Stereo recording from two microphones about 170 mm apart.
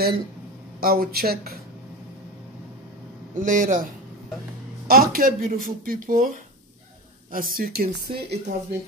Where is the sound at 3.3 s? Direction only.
50° right (ahead or behind).